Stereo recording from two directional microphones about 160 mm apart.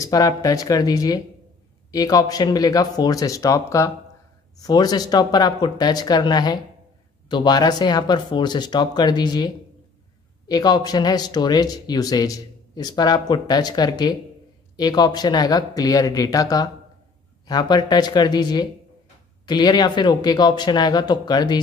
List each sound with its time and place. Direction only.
0.0 s speech: 20° left (ahead or behind)
10.5 s speech: 25° left (ahead or behind)